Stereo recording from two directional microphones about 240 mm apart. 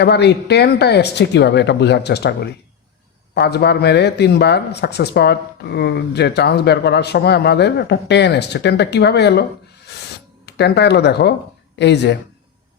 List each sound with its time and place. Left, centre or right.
0.0 s speech: left
10.4 s speech: left